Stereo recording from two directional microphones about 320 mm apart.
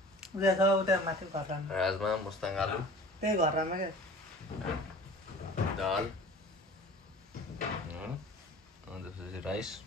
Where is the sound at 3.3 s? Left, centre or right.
Right.